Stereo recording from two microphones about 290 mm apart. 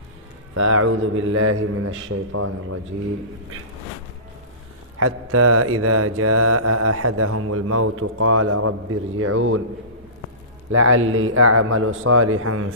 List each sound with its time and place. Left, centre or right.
0.5 s mantra: right
4.9 s mantra: right
10.7 s mantra: right